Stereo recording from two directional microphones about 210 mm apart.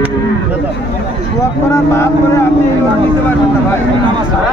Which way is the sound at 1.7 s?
15° left (ahead or behind).